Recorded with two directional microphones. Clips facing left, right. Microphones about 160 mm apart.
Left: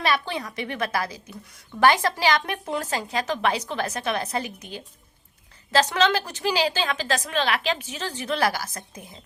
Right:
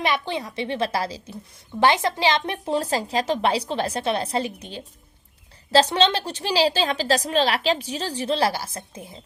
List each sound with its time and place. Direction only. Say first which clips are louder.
0.0 s a woman's voice: right 1 dB; 20° right (ahead or behind)